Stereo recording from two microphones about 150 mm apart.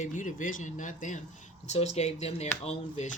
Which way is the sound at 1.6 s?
45° left (ahead or behind).